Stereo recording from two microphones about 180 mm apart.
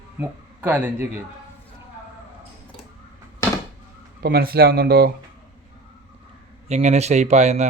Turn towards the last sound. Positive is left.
turn(degrees=-40)  # may be behind; listen again after turning